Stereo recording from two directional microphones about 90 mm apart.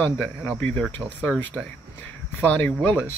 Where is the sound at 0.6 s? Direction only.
15° left (ahead or behind).